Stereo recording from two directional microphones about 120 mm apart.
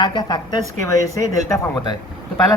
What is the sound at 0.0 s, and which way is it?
Speech, 40° left (ahead or behind).